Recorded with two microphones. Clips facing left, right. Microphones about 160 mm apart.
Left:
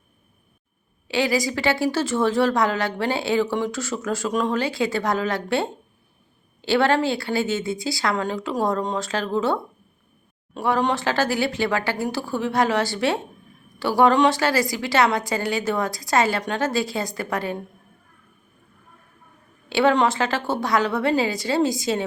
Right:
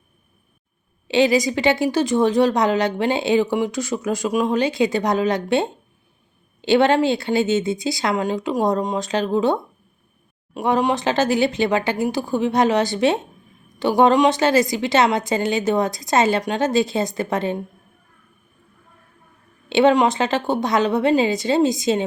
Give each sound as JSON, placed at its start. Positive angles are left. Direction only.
{"t": 1.0, "sound": "speech", "side_deg": -20}
{"t": 19.6, "sound": "speech", "side_deg": -20}